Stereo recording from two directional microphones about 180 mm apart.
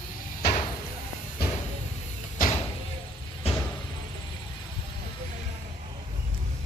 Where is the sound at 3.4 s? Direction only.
30° left (ahead or behind).